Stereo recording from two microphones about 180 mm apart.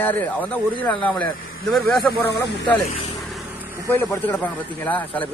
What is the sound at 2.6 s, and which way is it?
Speech, 30° left (ahead or behind).